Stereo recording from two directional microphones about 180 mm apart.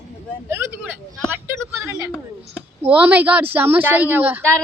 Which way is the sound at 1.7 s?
15° right (ahead or behind).